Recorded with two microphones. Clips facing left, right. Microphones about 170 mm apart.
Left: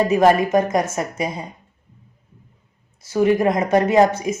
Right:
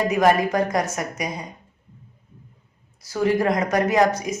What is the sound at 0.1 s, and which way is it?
Speech, 25° left (ahead or behind).